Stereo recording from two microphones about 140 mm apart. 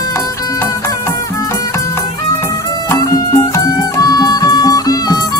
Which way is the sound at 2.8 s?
25° left (ahead or behind).